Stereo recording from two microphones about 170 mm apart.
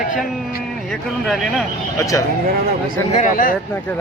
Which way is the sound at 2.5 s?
65° right (ahead or behind).